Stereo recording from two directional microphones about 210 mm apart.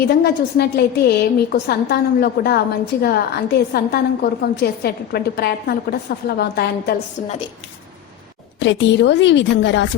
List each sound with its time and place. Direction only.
0.1 s a woman's voice: 50° left (ahead or behind)
8.5 s a woman's voice: 60° left (ahead or behind)